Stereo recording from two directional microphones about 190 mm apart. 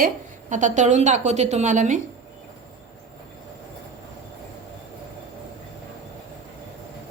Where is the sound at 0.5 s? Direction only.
40° right (ahead or behind).